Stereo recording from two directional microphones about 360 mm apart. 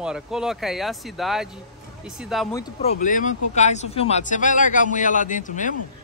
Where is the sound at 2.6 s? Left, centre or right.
Centre.